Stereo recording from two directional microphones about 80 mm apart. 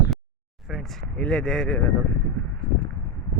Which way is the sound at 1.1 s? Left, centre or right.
Centre.